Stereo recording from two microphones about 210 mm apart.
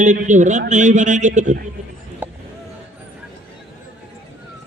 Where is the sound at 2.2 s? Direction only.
10° right (ahead or behind).